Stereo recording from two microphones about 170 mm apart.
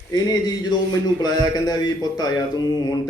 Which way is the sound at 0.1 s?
25° left (ahead or behind).